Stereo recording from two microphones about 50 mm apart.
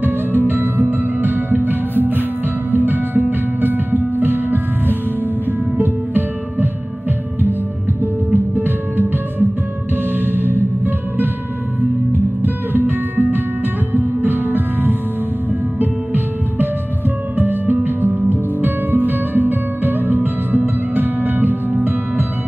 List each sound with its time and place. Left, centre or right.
0.4 s music: right
5.8 s music: right
8.0 s music: right
12.7 s music: right